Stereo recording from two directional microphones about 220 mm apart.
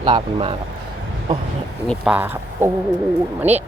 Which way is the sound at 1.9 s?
5° right (ahead or behind).